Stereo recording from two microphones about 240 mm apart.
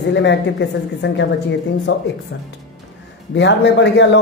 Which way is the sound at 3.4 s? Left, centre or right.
Left.